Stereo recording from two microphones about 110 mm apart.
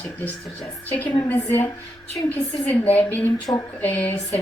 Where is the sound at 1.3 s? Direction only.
20° left (ahead or behind).